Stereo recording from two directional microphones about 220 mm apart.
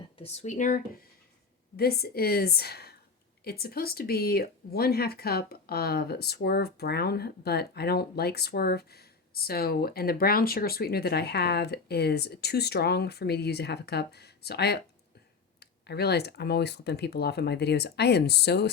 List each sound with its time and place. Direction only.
0.2 s speech: 30° left (ahead or behind); by 18.7 s 50° left (ahead or behind)